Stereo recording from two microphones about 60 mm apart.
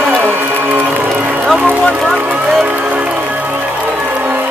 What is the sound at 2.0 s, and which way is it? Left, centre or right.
Music, centre.